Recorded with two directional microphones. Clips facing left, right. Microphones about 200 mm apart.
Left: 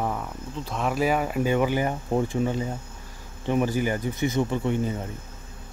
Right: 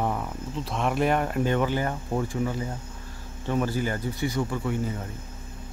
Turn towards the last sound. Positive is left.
turn(degrees=25)  # may be behind; listen again after turning